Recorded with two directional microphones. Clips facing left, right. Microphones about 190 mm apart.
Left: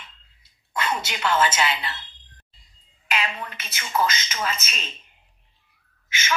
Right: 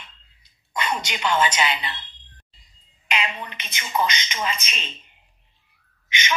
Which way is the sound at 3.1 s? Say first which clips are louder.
Even; 20° right (ahead or behind).